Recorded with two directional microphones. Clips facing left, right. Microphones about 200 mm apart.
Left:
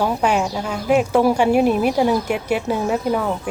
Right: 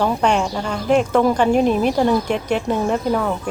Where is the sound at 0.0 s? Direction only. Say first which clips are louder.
Right 1 dB; 10° left (ahead or behind).